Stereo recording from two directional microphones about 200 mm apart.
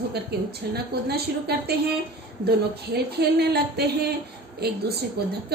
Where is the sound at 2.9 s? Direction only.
55° right (ahead or behind).